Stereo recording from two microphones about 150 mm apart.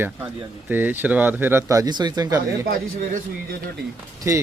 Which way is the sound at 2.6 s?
75° right (ahead or behind).